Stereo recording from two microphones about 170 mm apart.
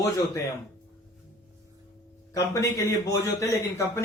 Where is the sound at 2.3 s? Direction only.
20° left (ahead or behind).